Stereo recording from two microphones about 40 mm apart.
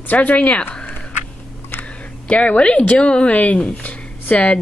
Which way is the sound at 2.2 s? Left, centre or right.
Left.